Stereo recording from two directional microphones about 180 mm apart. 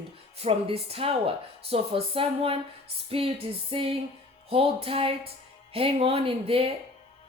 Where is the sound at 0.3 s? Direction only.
35° right (ahead or behind).